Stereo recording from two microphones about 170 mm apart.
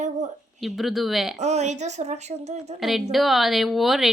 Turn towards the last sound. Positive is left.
turn(degrees=0)  # may be behind; listen again after turning